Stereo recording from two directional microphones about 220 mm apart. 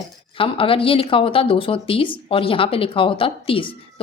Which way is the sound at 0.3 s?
25° left (ahead or behind).